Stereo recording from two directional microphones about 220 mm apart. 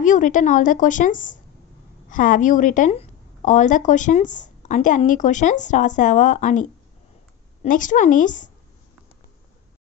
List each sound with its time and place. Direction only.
0.0 s a woman's voice: 35° left (ahead or behind)